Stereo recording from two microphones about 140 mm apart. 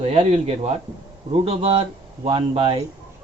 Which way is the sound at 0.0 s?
50° right (ahead or behind).